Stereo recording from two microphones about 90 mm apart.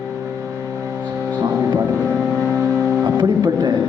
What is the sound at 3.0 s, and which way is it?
Speech, 45° right (ahead or behind).